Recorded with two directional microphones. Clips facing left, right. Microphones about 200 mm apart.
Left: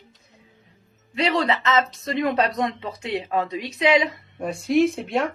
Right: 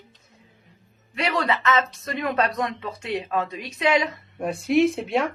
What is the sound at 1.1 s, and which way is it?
Speech, 25° left (ahead or behind).